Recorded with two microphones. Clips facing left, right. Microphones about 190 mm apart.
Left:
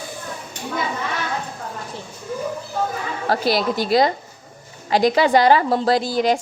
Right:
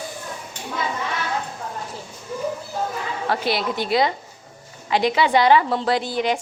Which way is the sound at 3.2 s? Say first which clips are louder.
Left 4 dB; 40° left (ahead or behind).